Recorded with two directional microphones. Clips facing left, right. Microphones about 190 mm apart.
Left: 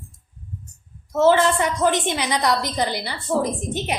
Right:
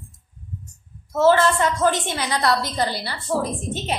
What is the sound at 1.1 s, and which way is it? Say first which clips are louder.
A woman's voice: even; 15° left (ahead or behind).